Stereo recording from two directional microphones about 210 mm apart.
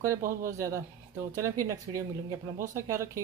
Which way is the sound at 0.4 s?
15° right (ahead or behind).